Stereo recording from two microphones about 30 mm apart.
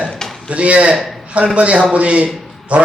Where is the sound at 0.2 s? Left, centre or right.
Left.